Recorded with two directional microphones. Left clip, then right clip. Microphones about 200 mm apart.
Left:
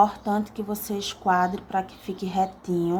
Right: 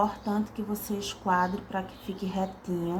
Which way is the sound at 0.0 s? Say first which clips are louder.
Left 7 dB; 45° left (ahead or behind).